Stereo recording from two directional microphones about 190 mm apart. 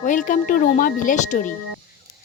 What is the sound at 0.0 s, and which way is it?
Speech, 40° left (ahead or behind).